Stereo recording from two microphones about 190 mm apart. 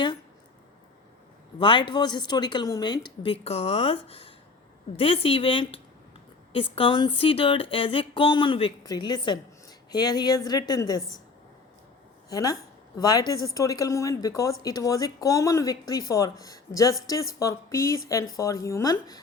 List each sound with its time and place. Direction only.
1.5 s speech: 25° left (ahead or behind)
12.3 s a woman's voice: 20° left (ahead or behind)